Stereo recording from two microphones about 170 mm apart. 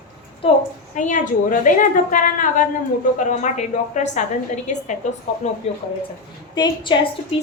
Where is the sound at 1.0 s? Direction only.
50° left (ahead or behind).